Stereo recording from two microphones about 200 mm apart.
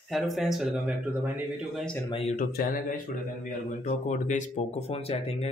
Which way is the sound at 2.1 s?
35° left (ahead or behind).